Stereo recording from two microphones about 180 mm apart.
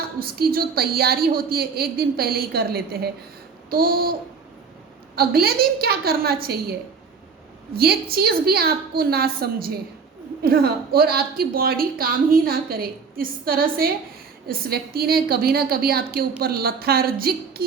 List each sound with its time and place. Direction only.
0.2 s a woman's voice: 55° right (ahead or behind)
5.1 s a woman's voice: 60° right (ahead or behind)
7.8 s a woman's voice: 60° right (ahead or behind)